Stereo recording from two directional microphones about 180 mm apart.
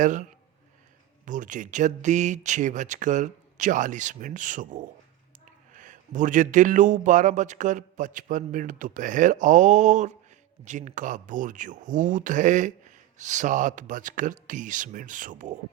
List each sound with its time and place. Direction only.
0.0 s speech: 45° right (ahead or behind)